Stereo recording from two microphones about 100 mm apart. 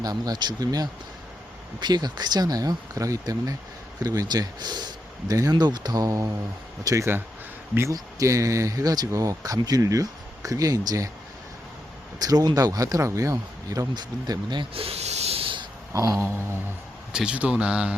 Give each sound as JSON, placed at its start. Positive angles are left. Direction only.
{"t": 0.0, "sound": "speech", "side_deg": -40}
{"t": 12.2, "sound": "speech", "side_deg": -40}
{"t": 14.7, "sound": "snake", "side_deg": -75}
{"t": 15.9, "sound": "a sound", "side_deg": -35}
{"t": 17.1, "sound": "speech", "side_deg": -10}